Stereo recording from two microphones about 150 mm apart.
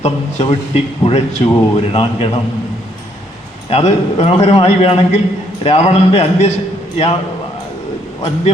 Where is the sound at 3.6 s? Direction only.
40° left (ahead or behind).